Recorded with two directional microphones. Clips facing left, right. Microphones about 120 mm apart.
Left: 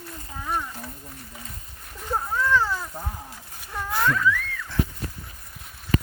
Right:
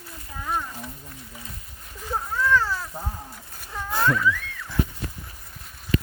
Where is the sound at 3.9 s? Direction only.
30° right (ahead or behind).